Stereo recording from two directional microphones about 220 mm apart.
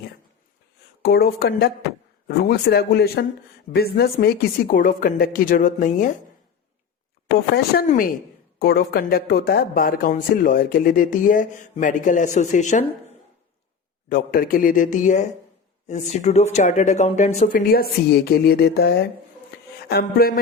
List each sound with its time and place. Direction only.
1.0 s speech: 45° left (ahead or behind)
7.5 s speech: 45° left (ahead or behind)
14.1 s speech: 40° left (ahead or behind)